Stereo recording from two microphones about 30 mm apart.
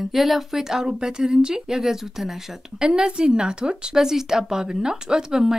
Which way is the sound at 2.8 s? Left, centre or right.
Right.